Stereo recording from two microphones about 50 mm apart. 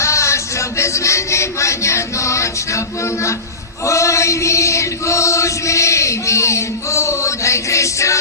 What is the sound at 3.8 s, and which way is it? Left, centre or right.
Chant, left.